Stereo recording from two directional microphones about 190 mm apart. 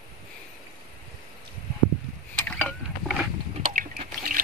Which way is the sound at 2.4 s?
5° left (ahead or behind).